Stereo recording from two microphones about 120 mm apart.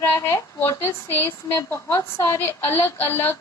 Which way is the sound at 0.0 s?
20° left (ahead or behind).